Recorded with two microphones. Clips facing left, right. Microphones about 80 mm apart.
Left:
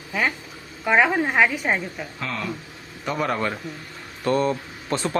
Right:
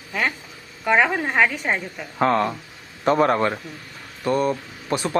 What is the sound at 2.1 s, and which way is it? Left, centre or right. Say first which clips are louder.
Speech: right 14 dB; right.